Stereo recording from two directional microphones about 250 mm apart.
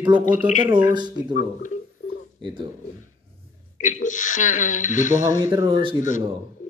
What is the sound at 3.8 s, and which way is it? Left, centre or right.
Speech, left.